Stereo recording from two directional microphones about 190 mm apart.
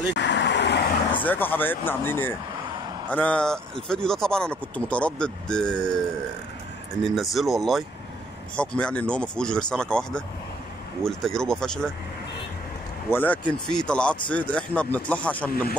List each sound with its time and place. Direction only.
0.1 s vehicle: 65° left (ahead or behind)
1.2 s speech: 10° left (ahead or behind)
7.1 s speech: centre (ahead or behind)
13.1 s speech: 10° left (ahead or behind)